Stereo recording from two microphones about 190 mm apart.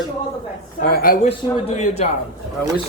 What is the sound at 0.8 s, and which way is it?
Speech, 50° left (ahead or behind).